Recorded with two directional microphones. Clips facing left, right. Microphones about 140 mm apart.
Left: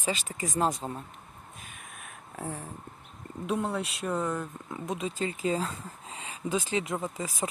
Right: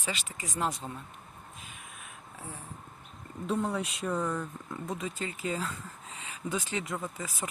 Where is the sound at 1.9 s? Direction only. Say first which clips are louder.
Left 4 dB; 60° left (ahead or behind).